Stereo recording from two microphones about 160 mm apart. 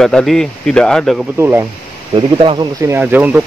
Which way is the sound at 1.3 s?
15° right (ahead or behind).